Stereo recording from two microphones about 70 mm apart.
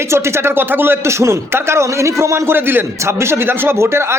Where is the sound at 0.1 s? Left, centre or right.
Right.